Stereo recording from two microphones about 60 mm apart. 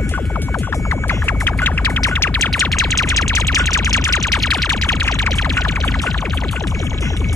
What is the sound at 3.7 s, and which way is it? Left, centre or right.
Music, left.